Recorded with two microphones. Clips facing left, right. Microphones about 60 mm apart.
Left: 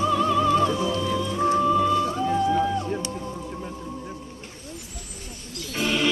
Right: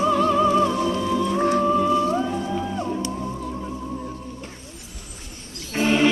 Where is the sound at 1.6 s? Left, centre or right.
Right.